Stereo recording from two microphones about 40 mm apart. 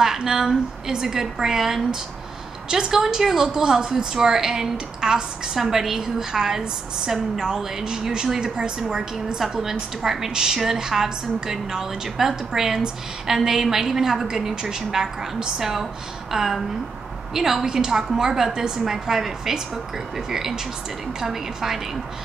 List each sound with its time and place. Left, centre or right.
0.0 s a woman's voice: centre
9.5 s a woman's voice: centre